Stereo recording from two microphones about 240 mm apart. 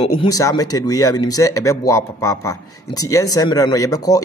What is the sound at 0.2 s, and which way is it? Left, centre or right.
Speech, centre.